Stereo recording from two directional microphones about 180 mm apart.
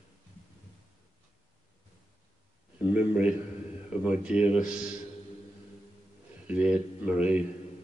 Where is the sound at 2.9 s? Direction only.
5° right (ahead or behind).